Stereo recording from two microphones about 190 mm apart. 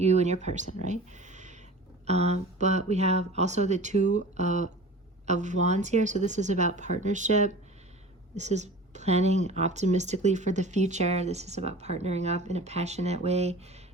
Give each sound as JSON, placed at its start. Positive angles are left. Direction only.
{"t": 0.0, "sound": "speech", "side_deg": -35}